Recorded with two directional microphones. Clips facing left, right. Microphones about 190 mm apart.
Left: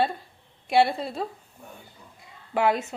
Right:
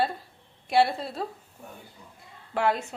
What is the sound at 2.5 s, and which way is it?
Speech, 5° left (ahead or behind).